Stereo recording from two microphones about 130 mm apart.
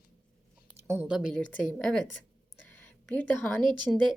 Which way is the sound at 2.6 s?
15° left (ahead or behind).